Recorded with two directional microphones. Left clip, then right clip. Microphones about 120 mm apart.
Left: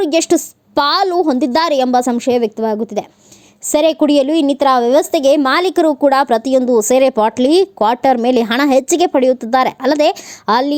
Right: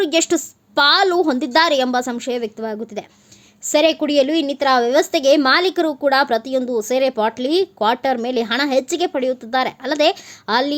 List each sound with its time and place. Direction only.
0.0 s a woman's voice: 40° left (ahead or behind)